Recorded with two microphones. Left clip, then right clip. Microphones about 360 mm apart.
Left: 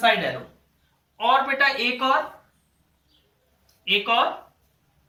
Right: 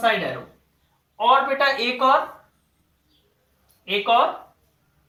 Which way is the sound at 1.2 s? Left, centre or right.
Centre.